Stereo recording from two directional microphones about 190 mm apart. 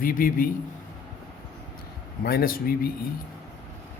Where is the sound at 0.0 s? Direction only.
50° left (ahead or behind).